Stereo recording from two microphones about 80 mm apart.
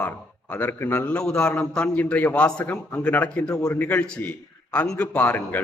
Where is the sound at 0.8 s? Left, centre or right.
Left.